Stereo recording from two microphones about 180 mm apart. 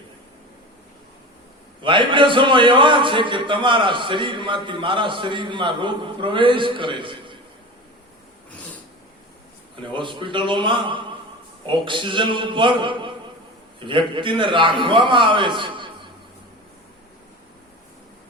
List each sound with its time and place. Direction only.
1.8 s a man's voice: 25° right (ahead or behind)
9.9 s a man's voice: 25° right (ahead or behind)